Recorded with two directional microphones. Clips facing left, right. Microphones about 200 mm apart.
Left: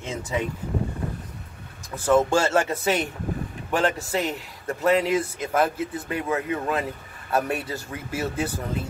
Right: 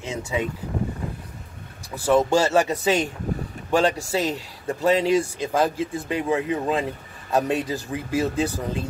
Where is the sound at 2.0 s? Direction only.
10° right (ahead or behind).